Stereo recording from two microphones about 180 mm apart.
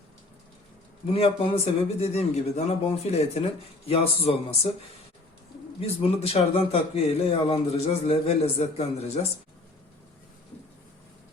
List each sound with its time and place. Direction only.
1.1 s speech: 30° left (ahead or behind)
5.8 s speech: 35° left (ahead or behind)